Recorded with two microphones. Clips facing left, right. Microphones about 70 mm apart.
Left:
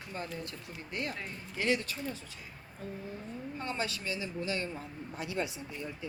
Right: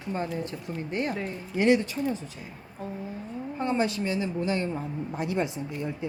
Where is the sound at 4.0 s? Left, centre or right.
Right.